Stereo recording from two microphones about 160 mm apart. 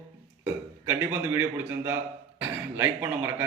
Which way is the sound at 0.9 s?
15° right (ahead or behind).